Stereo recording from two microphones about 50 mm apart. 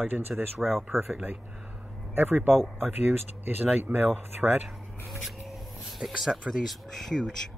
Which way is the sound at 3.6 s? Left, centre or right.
Right.